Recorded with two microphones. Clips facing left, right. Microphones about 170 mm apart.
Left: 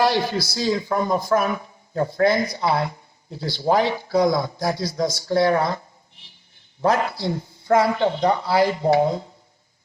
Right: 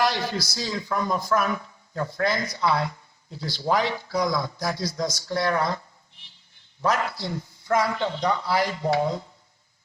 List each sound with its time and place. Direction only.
0.0 s speech: 25° left (ahead or behind)
6.8 s speech: 25° left (ahead or behind)